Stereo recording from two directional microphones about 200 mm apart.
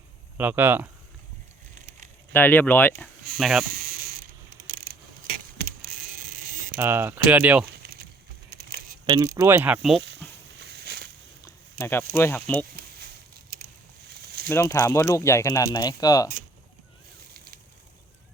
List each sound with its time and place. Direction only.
0.3 s speech: 10° right (ahead or behind)
2.3 s speech: 10° left (ahead or behind)
6.7 s speech: 10° right (ahead or behind)
9.0 s speech: 20° right (ahead or behind); by 10.0 s 5° right (ahead or behind)
10.0 s a sound: 60° right (ahead or behind)
11.4 s speech: 10° left (ahead or behind)
14.2 s a sound: 50° right (ahead or behind)
14.5 s speech: 15° left (ahead or behind)
17.3 s a sound: 50° right (ahead or behind)